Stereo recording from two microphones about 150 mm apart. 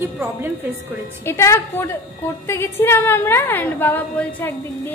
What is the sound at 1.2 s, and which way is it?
A woman's voice, 20° left (ahead or behind).